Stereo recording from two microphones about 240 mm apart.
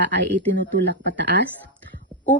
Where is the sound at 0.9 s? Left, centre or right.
Right.